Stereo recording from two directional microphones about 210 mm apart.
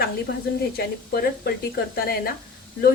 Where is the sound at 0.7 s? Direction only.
45° left (ahead or behind).